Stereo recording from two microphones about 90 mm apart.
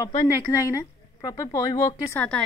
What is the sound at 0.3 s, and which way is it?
Speech, 35° left (ahead or behind).